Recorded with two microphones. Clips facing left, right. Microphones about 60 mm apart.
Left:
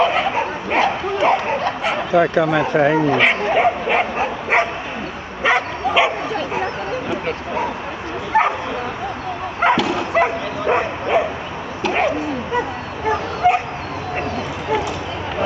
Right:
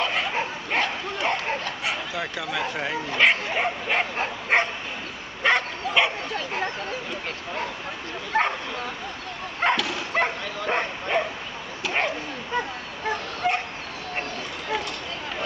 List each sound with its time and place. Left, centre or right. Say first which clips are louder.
0.0 s bow-wow: left 8 dB; centre
2.0 s speech: left 15 dB; left
3.2 s bow-wow: left 6 dB; centre
8.3 s bow-wow: left 7 dB; centre
9.6 s dog: left 7 dB; centre
10.7 s bow-wow: left 8 dB; centre